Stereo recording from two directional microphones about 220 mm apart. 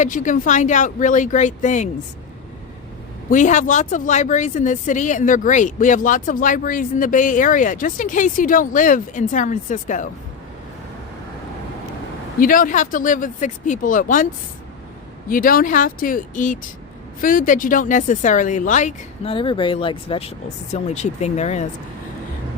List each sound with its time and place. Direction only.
0.0 s speech: 35° left (ahead or behind)
3.2 s speech: 35° left (ahead or behind)
12.4 s speech: 40° left (ahead or behind)
15.3 s speech: 40° left (ahead or behind)